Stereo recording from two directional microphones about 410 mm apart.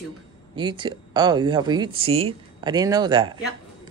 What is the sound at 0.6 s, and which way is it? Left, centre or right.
Speech, centre.